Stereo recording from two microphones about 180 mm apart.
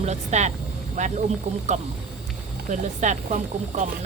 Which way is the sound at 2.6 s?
45° right (ahead or behind).